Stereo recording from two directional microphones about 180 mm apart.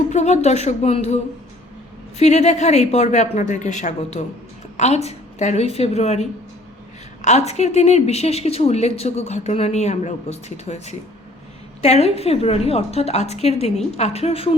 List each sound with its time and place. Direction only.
0.1 s a woman's voice: 40° left (ahead or behind)